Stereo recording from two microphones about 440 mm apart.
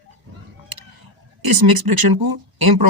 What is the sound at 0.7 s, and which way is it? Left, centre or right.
Tick, right.